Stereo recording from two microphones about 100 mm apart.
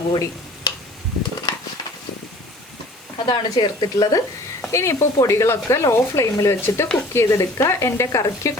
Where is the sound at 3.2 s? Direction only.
50° left (ahead or behind).